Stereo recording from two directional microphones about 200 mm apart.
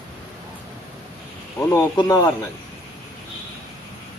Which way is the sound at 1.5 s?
15° left (ahead or behind).